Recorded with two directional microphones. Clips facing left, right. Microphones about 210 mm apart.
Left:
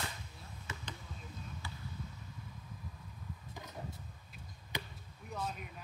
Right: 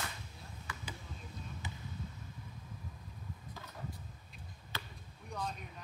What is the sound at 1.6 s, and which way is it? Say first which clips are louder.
Basketball bounce: right 2 dB; 20° right (ahead or behind).